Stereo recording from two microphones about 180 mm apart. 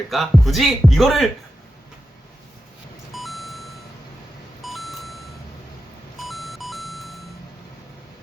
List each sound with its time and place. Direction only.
0.1 s speech: centre (ahead or behind)
3.1 s vehicle: centre (ahead or behind)
4.6 s beep: centre (ahead or behind)
6.1 s beep: centre (ahead or behind)